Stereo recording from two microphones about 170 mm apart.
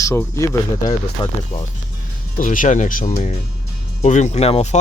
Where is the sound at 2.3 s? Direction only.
50° left (ahead or behind).